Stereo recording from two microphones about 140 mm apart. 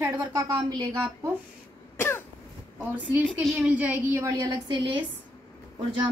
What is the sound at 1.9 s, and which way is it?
Cough, 20° left (ahead or behind).